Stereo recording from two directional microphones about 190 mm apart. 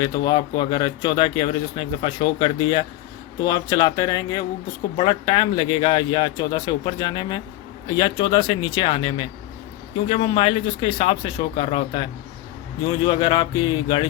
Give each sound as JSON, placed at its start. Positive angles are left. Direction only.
{"t": 0.0, "sound": "speech", "side_deg": 25}
{"t": 13.1, "sound": "speech", "side_deg": 25}